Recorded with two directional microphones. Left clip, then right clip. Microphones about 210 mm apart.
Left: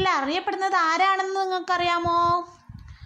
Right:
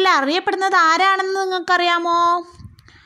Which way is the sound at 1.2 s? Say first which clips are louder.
Right 5 dB; 15° right (ahead or behind).